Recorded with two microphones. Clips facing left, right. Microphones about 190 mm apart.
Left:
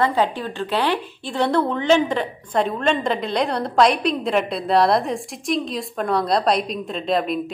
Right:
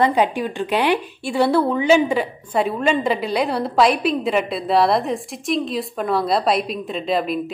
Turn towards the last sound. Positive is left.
turn(degrees=0)  # may be behind; listen again after turning